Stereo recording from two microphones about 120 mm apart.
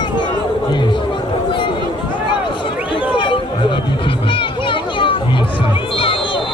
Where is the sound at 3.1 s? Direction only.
40° left (ahead or behind).